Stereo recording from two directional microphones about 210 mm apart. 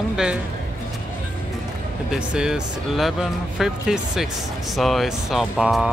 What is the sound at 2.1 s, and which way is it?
Speech, 5° right (ahead or behind).